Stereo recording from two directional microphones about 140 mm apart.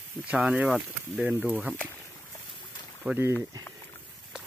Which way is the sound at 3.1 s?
15° right (ahead or behind).